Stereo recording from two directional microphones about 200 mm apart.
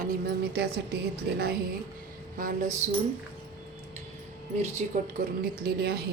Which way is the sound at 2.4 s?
40° right (ahead or behind).